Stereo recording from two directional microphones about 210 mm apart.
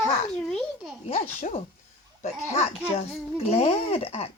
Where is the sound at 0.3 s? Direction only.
Centre (ahead or behind).